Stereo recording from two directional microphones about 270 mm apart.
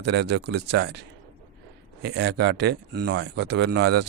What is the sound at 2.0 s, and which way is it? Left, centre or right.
Speech, right.